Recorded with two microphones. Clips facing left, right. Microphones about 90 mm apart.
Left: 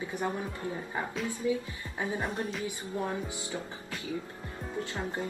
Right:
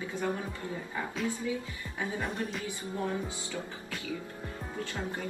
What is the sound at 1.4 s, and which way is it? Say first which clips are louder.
Speech: left 4 dB; 25° left (ahead or behind).